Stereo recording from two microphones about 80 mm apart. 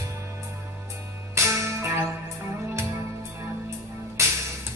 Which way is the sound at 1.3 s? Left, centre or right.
Right.